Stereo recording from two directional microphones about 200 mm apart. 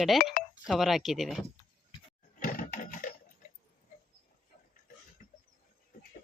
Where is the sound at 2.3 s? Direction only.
40° left (ahead or behind).